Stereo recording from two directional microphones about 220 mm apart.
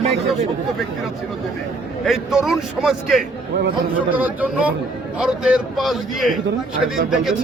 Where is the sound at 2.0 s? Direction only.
Centre (ahead or behind).